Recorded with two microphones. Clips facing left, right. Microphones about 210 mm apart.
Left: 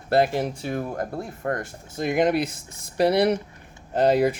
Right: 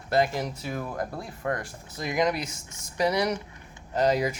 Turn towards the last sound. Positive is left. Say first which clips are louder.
# left 5 dB
turn(degrees=60)  # may be behind; listen again after turning